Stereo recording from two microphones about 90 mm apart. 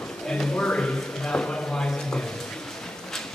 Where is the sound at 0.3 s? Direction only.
10° left (ahead or behind).